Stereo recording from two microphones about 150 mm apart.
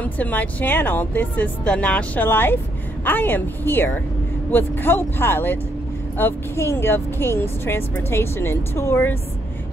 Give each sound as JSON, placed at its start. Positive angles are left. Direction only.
{"t": 0.0, "sound": "speech", "side_deg": 10}